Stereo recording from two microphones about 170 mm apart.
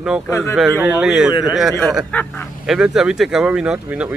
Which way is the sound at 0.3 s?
15° left (ahead or behind).